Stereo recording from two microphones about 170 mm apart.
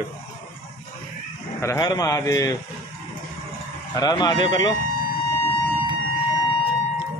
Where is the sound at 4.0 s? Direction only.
25° left (ahead or behind).